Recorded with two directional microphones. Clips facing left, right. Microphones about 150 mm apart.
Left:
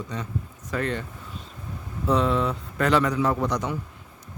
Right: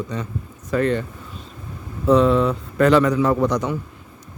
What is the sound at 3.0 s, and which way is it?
Speech, 70° right (ahead or behind).